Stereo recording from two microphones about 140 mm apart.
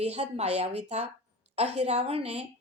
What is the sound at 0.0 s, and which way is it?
A woman's voice, 50° right (ahead or behind).